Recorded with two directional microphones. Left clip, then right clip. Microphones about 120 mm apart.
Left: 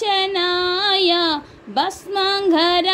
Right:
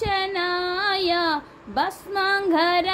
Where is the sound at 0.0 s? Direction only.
55° left (ahead or behind).